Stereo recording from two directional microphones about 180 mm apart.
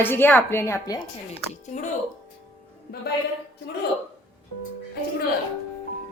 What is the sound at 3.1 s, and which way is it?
Speech, 60° left (ahead or behind).